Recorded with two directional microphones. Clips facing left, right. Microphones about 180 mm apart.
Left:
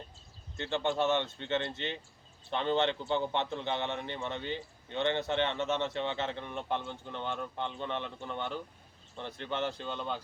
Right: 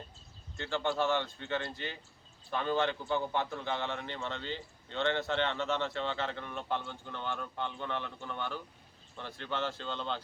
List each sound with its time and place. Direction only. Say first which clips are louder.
0.5 s a man's voice: left 1 dB; 20° left (ahead or behind)